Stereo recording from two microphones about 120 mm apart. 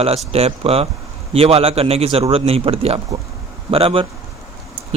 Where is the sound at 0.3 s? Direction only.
55° right (ahead or behind).